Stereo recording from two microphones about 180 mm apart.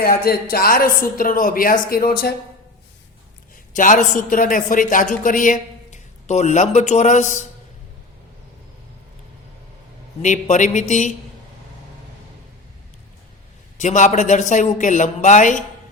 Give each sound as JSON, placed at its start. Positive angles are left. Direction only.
{"t": 0.0, "sound": "a man's voice", "side_deg": 55}
{"t": 3.8, "sound": "a man's voice", "side_deg": 50}
{"t": 10.2, "sound": "speech", "side_deg": 45}
{"t": 13.8, "sound": "a man's voice", "side_deg": 40}